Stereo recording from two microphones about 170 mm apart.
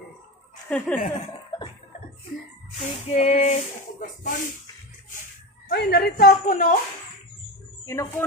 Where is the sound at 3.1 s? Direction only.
40° left (ahead or behind).